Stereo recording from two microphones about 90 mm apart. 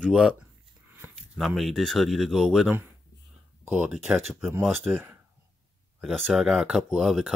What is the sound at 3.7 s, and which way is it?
Speech, 15° right (ahead or behind).